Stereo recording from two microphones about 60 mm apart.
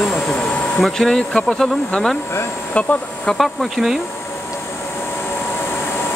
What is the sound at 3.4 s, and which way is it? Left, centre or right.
Speech, centre.